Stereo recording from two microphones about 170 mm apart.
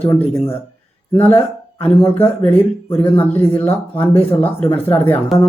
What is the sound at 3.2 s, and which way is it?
Speech, 10° left (ahead or behind).